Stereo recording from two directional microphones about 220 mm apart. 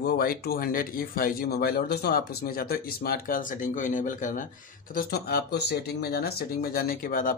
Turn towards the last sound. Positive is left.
turn(degrees=40)  # may be behind; listen again after turning